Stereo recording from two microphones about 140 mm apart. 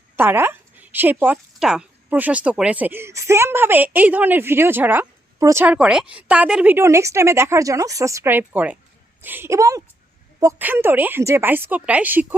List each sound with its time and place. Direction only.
0.2 s speech: 15° right (ahead or behind)
5.6 s a woman's voice: 10° right (ahead or behind)